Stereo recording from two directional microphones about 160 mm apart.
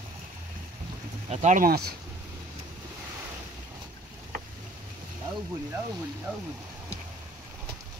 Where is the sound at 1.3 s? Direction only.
50° right (ahead or behind).